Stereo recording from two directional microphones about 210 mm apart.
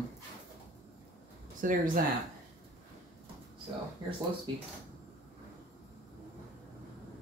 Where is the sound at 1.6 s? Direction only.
40° right (ahead or behind).